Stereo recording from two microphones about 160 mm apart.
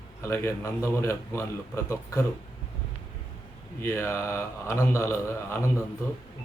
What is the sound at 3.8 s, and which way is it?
A man's voice, 15° left (ahead or behind).